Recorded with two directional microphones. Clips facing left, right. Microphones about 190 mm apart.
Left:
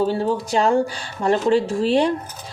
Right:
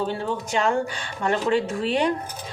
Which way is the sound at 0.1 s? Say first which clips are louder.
Left 5 dB; 35° left (ahead or behind).